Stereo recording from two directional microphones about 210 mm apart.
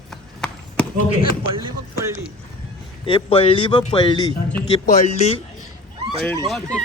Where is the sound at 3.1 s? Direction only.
25° left (ahead or behind).